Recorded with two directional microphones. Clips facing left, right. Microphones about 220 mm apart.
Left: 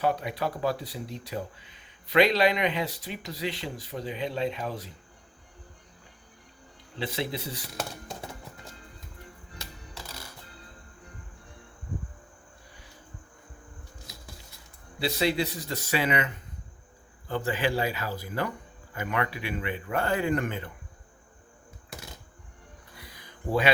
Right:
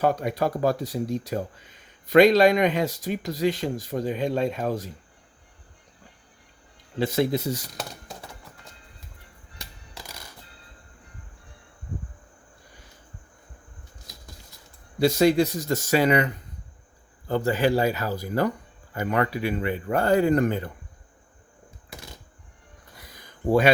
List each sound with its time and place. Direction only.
0.0 s speech: 45° right (ahead or behind)
7.0 s speech: 45° right (ahead or behind)
10.0 s music: 15° right (ahead or behind)
14.9 s speech: 45° right (ahead or behind)
23.0 s a sound: 45° right (ahead or behind)